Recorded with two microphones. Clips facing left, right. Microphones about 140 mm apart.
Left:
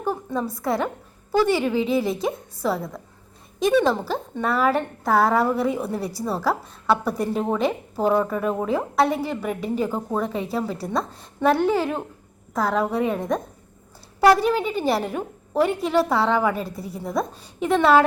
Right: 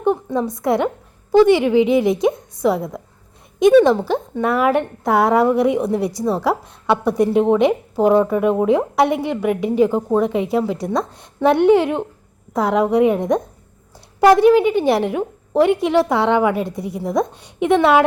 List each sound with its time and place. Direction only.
0.0 s a woman's voice: 20° right (ahead or behind)
4.1 s a woman's voice: 15° right (ahead or behind)
16.6 s a woman's voice: 80° right
17.0 s a woman's voice: 15° right (ahead or behind)